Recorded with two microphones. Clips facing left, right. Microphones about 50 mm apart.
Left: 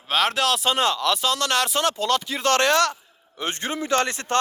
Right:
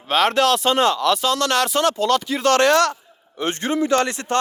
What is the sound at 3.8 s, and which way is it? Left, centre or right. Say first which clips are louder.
Speech: right 2 dB; left.